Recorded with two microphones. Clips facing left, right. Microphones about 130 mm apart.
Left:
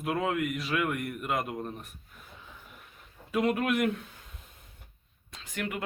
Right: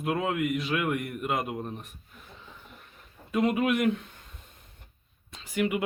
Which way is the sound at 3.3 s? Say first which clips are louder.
Right 2 dB; centre (ahead or behind).